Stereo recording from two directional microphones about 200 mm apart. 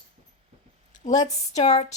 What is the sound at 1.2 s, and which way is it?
Speech, 35° left (ahead or behind).